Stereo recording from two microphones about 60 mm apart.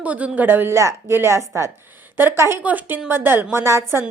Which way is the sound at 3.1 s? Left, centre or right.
Right.